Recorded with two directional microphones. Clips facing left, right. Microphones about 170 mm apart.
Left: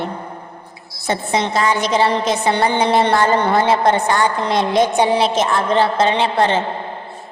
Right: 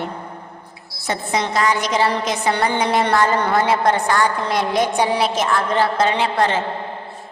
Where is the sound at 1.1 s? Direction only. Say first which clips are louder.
Left 3 dB; 25° left (ahead or behind).